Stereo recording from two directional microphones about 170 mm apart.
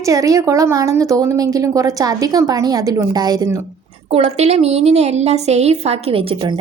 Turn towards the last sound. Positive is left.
turn(degrees=-30)  # may be behind; listen again after turning